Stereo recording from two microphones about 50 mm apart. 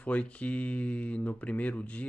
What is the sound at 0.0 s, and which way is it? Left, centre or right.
Speech, left.